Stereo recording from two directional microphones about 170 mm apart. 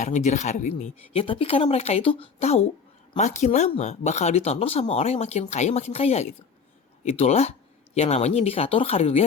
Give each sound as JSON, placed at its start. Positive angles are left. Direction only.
{"t": 0.0, "sound": "speech", "side_deg": 45}